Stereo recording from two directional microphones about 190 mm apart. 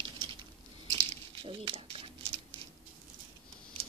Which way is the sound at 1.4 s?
30° right (ahead or behind).